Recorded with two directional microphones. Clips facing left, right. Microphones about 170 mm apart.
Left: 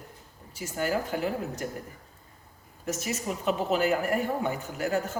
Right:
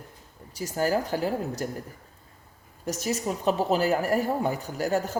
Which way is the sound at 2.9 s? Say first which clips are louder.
Right 6 dB; 35° right (ahead or behind).